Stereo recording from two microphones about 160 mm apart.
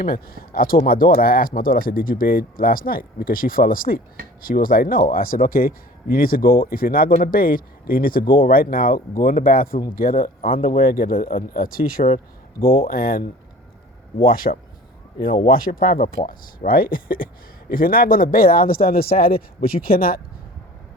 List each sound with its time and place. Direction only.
0.0 s speech: 65° left (ahead or behind)
15.3 s speech: 35° left (ahead or behind)
15.5 s speech: 65° left (ahead or behind)